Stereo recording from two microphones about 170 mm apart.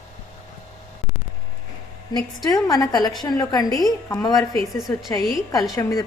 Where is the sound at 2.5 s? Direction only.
25° left (ahead or behind).